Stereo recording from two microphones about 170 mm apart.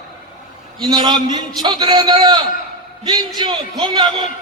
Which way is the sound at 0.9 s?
25° right (ahead or behind).